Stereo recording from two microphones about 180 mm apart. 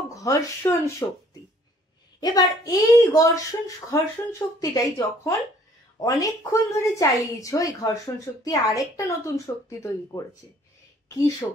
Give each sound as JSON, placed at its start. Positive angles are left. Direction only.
{"t": 0.1, "sound": "speech", "side_deg": 20}
{"t": 2.1, "sound": "a woman's voice", "side_deg": 20}